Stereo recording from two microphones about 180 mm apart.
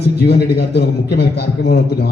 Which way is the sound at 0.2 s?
65° left (ahead or behind).